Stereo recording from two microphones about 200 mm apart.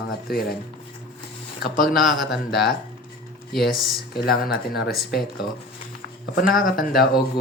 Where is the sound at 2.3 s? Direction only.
55° left (ahead or behind).